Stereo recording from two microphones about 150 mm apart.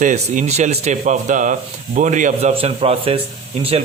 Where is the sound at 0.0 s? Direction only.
55° right (ahead or behind).